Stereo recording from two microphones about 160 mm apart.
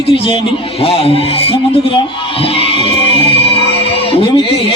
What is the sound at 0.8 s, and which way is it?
Speech, 35° left (ahead or behind).